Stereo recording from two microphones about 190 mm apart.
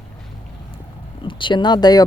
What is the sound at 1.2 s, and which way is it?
Speech, 25° left (ahead or behind).